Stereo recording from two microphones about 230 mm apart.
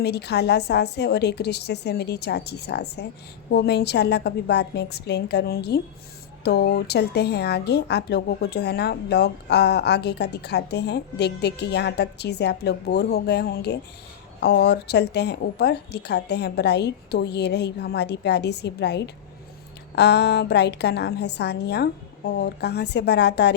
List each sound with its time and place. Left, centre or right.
0.0 s a woman's voice: left